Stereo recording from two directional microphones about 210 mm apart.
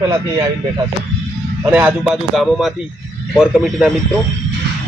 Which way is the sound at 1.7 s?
5° right (ahead or behind).